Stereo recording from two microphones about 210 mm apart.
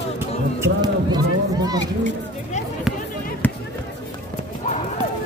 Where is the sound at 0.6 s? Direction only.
20° right (ahead or behind).